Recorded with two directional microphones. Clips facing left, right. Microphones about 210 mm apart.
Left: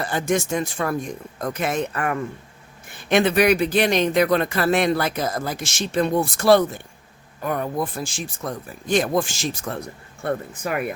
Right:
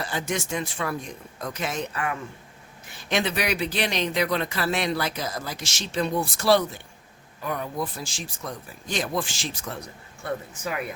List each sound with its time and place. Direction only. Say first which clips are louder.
0.0 s speech: left 6 dB; 50° left (ahead or behind)
10.2 s speech: left 5 dB; 55° left (ahead or behind)